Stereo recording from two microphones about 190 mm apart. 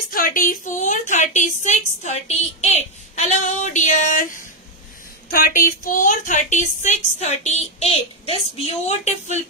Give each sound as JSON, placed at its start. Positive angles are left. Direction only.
{"t": 0.1, "sound": "a woman's voice", "side_deg": 45}
{"t": 5.3, "sound": "a woman's voice", "side_deg": 50}